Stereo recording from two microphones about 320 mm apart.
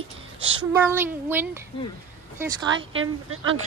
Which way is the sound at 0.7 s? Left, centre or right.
Centre.